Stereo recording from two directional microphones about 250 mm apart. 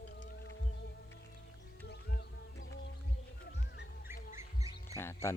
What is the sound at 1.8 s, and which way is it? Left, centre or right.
Music, left.